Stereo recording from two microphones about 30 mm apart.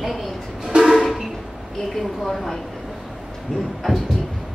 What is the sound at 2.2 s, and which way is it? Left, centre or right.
Speech, centre.